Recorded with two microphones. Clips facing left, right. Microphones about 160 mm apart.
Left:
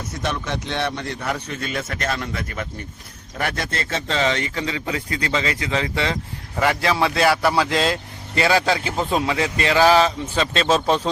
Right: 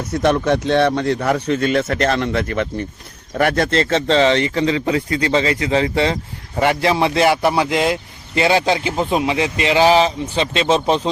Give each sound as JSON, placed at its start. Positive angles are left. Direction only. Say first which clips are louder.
{"t": 0.1, "sound": "a man's voice", "louder": "right 12 dB", "side_deg": -60}
{"t": 4.1, "sound": "speech", "louder": "right 7 dB", "side_deg": -30}